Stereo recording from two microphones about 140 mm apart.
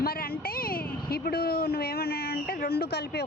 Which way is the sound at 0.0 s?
90° left.